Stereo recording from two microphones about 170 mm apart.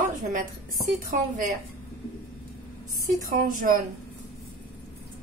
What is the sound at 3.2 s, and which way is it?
Speech, 55° right (ahead or behind).